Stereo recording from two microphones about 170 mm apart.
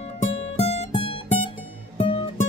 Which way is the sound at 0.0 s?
40° left (ahead or behind).